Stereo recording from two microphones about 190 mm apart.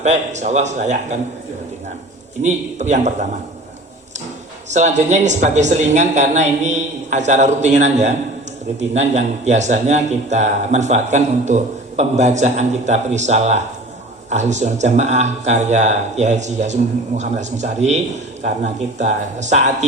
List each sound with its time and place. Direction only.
0.0 s a man's voice: 35° right (ahead or behind)
2.4 s a man's voice: 40° right (ahead or behind)
4.7 s a man's voice: 40° right (ahead or behind)